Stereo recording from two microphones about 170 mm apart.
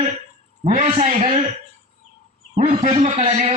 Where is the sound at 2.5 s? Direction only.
40° right (ahead or behind).